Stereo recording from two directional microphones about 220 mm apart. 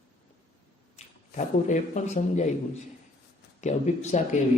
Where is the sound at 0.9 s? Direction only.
35° left (ahead or behind).